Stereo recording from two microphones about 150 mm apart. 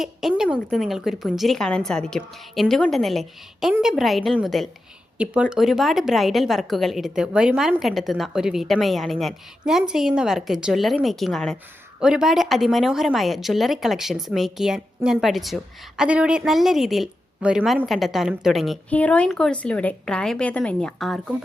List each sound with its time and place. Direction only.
0.0 s speech: centre (ahead or behind)
18.9 s a woman's voice: 10° left (ahead or behind)